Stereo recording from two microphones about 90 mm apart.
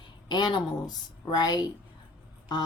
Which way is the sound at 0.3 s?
55° left (ahead or behind).